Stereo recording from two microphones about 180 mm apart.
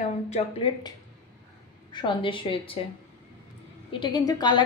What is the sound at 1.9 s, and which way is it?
Speech, 25° left (ahead or behind).